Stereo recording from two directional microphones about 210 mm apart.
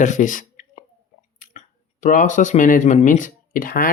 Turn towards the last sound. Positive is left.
turn(degrees=45)  # may be behind; listen again after turning